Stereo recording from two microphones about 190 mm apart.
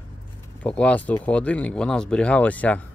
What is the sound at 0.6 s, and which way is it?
Speech, 5° left (ahead or behind).